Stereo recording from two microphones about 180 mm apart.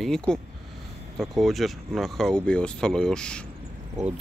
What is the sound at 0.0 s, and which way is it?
Speech, 5° left (ahead or behind).